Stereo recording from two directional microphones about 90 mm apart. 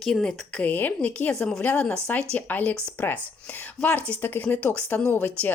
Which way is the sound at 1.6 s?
20° left (ahead or behind).